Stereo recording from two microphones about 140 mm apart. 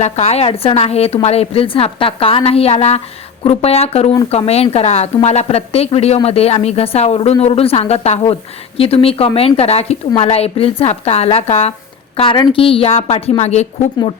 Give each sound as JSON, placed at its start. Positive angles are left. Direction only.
{"t": 0.0, "sound": "a woman's voice", "side_deg": 50}